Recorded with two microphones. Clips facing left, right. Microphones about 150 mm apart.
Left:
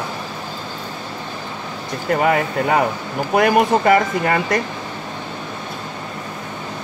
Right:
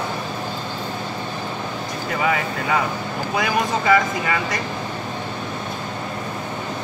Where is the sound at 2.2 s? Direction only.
50° left (ahead or behind).